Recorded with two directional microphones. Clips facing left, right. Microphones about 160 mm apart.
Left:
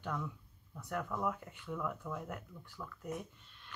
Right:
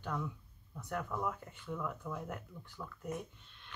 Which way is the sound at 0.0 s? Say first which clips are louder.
Right 1 dB; 5° right (ahead or behind).